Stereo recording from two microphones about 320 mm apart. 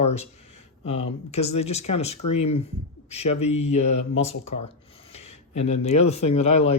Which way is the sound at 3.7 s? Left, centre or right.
Left.